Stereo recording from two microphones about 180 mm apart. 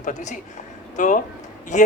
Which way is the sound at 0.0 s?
40° left (ahead or behind).